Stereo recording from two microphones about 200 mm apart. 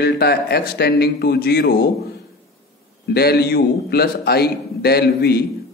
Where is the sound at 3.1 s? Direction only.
50° left (ahead or behind).